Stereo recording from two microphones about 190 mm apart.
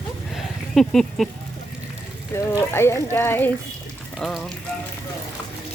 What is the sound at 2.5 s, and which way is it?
Speech, 15° left (ahead or behind).